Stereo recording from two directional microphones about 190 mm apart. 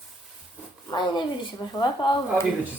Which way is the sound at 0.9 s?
20° left (ahead or behind).